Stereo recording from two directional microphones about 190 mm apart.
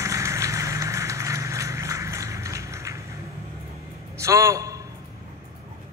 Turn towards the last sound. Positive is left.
turn(degrees=-15)  # may be behind; listen again after turning